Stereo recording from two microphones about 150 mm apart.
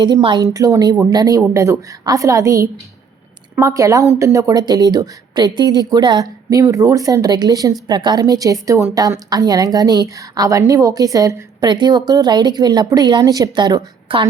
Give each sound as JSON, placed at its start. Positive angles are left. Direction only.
{"t": 0.0, "sound": "a woman's voice", "side_deg": -35}
{"t": 0.4, "sound": "a woman's voice", "side_deg": -20}